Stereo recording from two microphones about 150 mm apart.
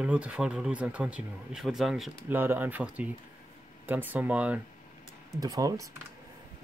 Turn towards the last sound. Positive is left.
turn(degrees=-25)  # may be behind; listen again after turning